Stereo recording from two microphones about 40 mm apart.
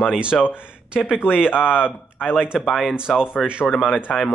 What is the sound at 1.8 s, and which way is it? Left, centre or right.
Speech, left.